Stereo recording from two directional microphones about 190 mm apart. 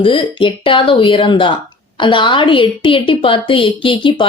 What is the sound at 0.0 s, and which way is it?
A woman's voice, 25° left (ahead or behind).